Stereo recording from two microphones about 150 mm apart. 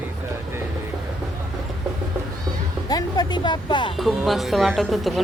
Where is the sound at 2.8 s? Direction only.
25° left (ahead or behind).